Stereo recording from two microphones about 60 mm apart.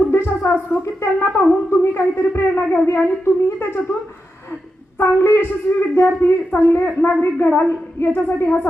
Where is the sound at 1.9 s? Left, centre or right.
Left.